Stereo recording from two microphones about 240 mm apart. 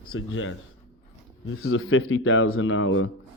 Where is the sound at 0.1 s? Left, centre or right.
Left.